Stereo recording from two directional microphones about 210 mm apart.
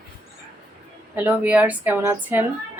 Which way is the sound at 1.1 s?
10° right (ahead or behind).